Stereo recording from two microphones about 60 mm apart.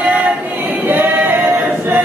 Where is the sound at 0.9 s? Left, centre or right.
Right.